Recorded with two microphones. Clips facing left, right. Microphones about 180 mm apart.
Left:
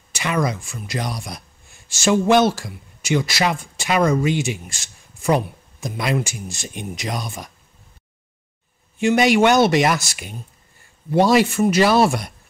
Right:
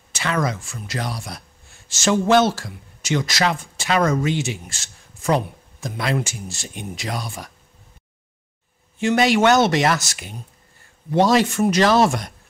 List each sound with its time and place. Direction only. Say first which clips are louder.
0.1 s speech: left 1 dB; 15° left (ahead or behind)
9.0 s speech: left 1 dB; 15° left (ahead or behind)